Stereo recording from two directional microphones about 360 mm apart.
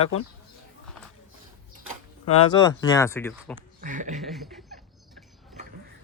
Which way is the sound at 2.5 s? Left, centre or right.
Centre.